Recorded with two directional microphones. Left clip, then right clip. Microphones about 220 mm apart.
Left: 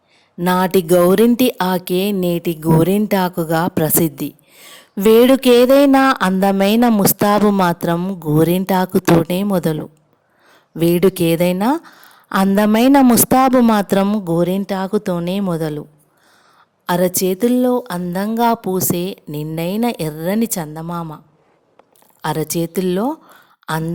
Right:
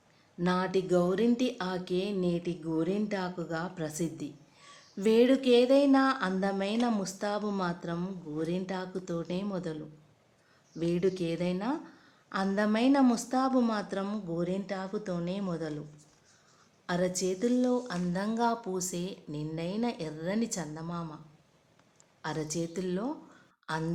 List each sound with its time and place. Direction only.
0.3 s speech: 45° left (ahead or behind)
10.8 s speech: 45° left (ahead or behind)
16.8 s speech: 45° left (ahead or behind)
22.2 s a woman's voice: 45° left (ahead or behind)